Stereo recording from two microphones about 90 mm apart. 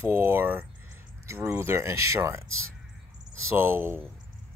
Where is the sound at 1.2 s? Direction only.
35° right (ahead or behind).